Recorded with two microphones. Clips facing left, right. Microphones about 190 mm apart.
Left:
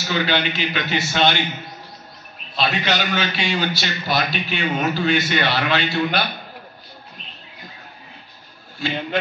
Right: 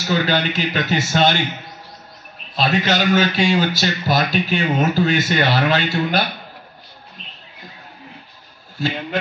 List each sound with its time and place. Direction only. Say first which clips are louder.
0.1 s a man's voice: right 3 dB; 45° right (ahead or behind)
2.5 s a man's voice: right 3 dB; 45° right (ahead or behind)